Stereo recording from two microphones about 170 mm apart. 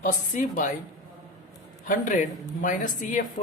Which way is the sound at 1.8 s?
50° left (ahead or behind).